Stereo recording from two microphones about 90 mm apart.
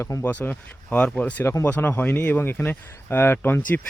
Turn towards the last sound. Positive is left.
turn(degrees=25)  # may be behind; listen again after turning